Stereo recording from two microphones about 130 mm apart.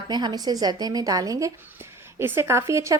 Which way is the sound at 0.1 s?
30° right (ahead or behind).